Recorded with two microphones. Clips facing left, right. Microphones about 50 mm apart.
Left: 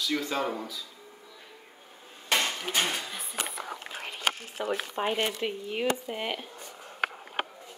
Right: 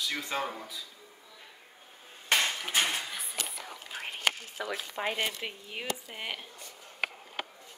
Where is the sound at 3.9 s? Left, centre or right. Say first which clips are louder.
Left 2 dB; left.